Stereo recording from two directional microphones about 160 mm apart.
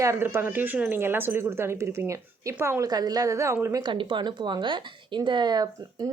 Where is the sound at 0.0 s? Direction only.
15° right (ahead or behind).